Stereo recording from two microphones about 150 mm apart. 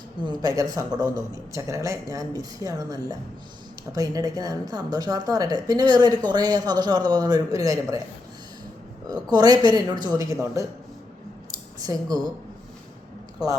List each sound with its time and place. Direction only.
0.3 s a man's voice: 25° right (ahead or behind)
9.3 s a man's voice: 25° right (ahead or behind)
11.5 s a sound: 25° right (ahead or behind)